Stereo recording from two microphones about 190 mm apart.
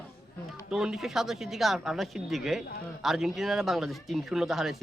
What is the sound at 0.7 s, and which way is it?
Speech, 5° right (ahead or behind).